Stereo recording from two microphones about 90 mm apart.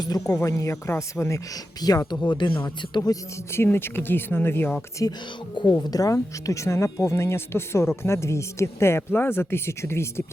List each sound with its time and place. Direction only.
0.0 s speech: 40° left (ahead or behind)
1.8 s speech: 45° left (ahead or behind)
2.6 s speech: 45° left (ahead or behind)
3.5 s speech: 25° left (ahead or behind)
5.0 s speech: 40° left (ahead or behind)